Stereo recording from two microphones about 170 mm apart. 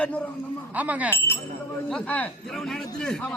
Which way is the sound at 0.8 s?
10° right (ahead or behind).